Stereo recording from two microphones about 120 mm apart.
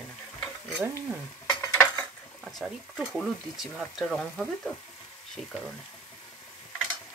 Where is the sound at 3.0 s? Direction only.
5° right (ahead or behind).